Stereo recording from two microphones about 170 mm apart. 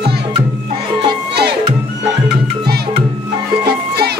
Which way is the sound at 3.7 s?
70° right (ahead or behind).